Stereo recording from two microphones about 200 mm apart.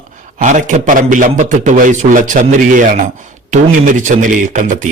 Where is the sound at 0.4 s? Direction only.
40° right (ahead or behind).